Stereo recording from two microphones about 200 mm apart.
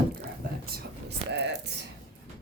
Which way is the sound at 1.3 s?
60° right (ahead or behind).